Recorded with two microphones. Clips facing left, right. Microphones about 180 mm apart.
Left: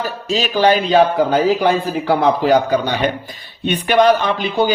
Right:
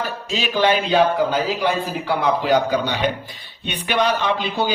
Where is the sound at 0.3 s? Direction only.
40° left (ahead or behind).